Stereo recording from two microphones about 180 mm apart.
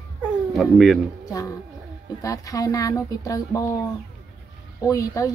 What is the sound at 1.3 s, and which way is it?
Speech, 20° left (ahead or behind).